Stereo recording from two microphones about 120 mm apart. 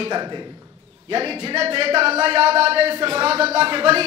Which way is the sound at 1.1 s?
50° right (ahead or behind).